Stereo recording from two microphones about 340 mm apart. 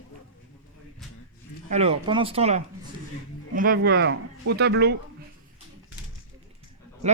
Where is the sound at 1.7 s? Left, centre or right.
Centre.